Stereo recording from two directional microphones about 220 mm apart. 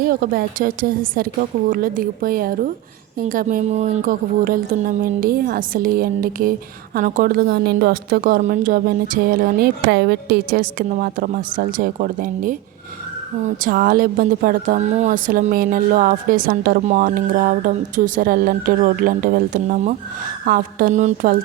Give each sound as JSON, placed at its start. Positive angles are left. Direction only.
{"t": 0.0, "sound": "speech", "side_deg": -40}
{"t": 13.6, "sound": "speech", "side_deg": -40}